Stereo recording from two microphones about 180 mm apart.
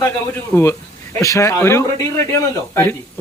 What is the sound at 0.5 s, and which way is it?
A man's voice, 10° left (ahead or behind).